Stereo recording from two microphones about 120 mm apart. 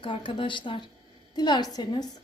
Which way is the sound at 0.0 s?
45° left (ahead or behind).